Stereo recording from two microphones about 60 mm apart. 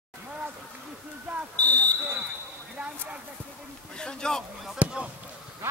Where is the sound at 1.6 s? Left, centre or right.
Left.